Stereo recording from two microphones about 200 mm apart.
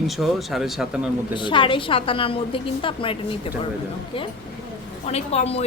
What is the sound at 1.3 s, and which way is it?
A woman's voice, 25° left (ahead or behind).